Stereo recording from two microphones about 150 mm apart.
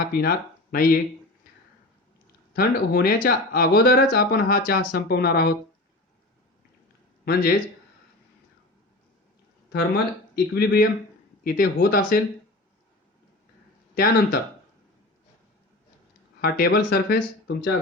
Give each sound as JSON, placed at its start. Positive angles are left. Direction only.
{"t": 0.1, "sound": "speech", "side_deg": 90}
{"t": 2.5, "sound": "speech", "side_deg": 90}
{"t": 9.7, "sound": "speech", "side_deg": 90}
{"t": 11.4, "sound": "speech", "side_deg": 75}
{"t": 13.9, "sound": "speech", "side_deg": 85}
{"t": 16.4, "sound": "speech", "side_deg": 90}